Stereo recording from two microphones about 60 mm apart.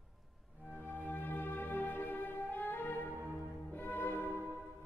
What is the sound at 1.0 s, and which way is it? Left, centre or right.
Music, left.